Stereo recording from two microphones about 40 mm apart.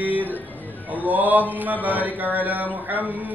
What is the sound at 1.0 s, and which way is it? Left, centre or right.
A man's voice, right.